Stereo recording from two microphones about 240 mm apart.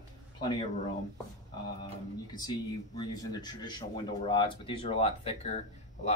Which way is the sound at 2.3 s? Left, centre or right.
Centre.